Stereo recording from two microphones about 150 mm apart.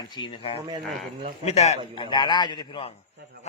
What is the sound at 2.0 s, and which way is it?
Speech, 30° left (ahead or behind).